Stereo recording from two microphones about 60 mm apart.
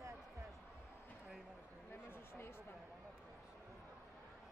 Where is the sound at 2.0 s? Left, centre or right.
Left.